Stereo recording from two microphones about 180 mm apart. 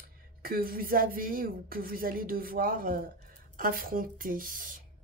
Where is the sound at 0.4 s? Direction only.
55° right (ahead or behind).